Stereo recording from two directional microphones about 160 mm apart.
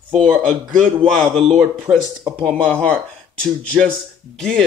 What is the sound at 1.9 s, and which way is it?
Speech, 10° right (ahead or behind).